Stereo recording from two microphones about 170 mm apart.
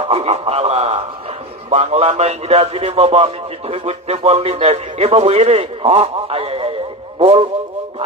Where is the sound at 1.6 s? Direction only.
40° right (ahead or behind).